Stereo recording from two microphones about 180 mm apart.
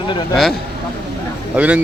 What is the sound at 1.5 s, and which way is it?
Speech, 10° right (ahead or behind).